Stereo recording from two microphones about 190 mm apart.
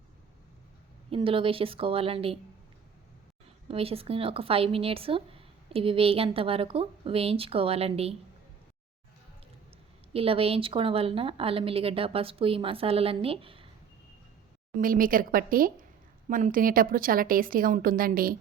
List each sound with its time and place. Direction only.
1.1 s speech: 30° right (ahead or behind)
3.7 s speech: 30° right (ahead or behind)
10.1 s speech: 30° right (ahead or behind)
14.8 s a woman's voice: 45° right (ahead or behind)